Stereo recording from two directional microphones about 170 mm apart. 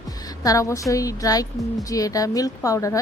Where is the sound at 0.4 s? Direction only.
20° left (ahead or behind).